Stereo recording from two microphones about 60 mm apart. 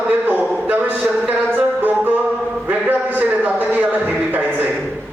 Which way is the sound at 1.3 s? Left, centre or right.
Right.